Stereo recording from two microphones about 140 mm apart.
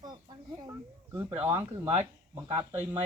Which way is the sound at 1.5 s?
25° right (ahead or behind).